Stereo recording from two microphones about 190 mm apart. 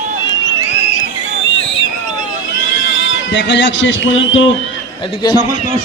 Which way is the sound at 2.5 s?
70° left (ahead or behind).